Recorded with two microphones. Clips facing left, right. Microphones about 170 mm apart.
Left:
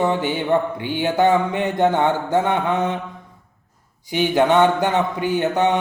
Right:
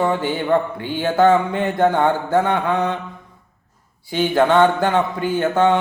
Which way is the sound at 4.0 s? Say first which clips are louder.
Right 1 dB; 15° left (ahead or behind).